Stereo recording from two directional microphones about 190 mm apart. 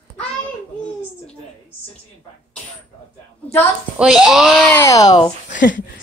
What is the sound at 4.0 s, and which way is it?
Speech, centre (ahead or behind).